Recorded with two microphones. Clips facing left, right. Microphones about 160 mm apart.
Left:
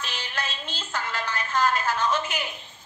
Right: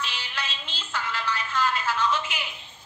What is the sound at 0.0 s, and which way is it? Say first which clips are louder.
Music: left 1 dB; 45° left (ahead or behind).